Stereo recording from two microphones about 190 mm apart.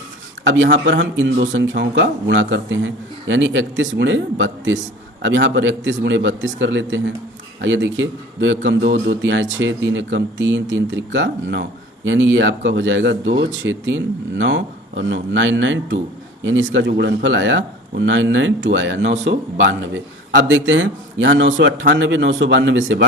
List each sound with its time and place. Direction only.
0.4 s speech: 75° right (ahead or behind)